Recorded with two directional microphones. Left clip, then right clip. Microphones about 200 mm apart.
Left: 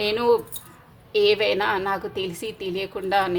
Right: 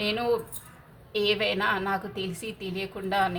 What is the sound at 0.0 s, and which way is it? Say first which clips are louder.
A woman's voice: left 6 dB; 40° left (ahead or behind).